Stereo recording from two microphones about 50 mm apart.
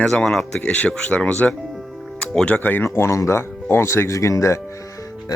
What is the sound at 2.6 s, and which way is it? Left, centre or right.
Speech, left.